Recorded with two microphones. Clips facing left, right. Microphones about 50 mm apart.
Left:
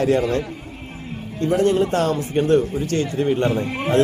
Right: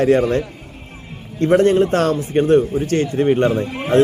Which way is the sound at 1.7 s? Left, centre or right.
Right.